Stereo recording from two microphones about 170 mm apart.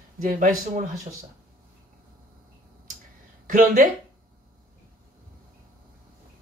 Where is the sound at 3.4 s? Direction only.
50° right (ahead or behind).